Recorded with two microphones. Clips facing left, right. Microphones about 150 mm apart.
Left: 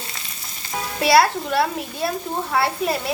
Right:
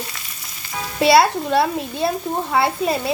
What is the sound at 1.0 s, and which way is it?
A child's voice, 25° right (ahead or behind).